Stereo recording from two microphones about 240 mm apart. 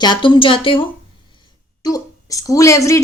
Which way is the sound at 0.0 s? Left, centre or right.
Centre.